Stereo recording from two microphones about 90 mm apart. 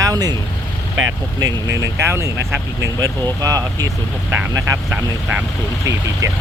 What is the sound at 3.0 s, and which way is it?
Speech, 45° right (ahead or behind).